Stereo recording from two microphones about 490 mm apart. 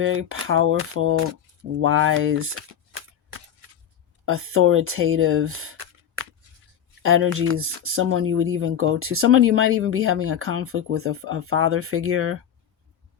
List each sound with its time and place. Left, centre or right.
0.0 s speech: right
1.8 s a sound: right
4.3 s speech: right